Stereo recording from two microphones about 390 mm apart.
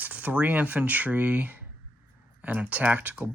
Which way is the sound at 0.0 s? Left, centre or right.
Centre.